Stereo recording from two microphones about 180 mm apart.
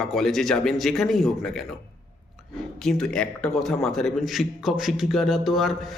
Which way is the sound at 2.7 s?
5° left (ahead or behind).